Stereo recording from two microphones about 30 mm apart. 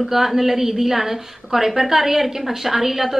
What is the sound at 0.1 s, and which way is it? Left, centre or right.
A woman's voice, centre.